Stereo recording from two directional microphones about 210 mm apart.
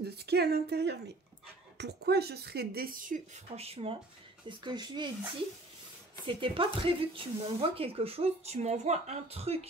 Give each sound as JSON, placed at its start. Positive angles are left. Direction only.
{"t": 0.0, "sound": "a woman's voice", "side_deg": -50}
{"t": 6.2, "sound": "speech", "side_deg": -25}